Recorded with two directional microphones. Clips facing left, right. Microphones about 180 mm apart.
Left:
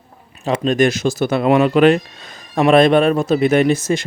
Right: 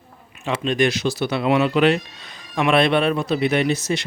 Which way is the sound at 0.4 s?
40° left (ahead or behind).